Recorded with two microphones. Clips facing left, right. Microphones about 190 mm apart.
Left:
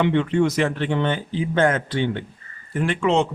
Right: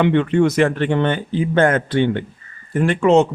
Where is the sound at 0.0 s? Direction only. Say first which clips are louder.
Right 4 dB; 60° right (ahead or behind).